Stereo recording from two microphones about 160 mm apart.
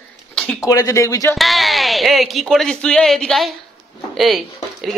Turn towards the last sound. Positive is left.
turn(degrees=0)  # may be behind; listen again after turning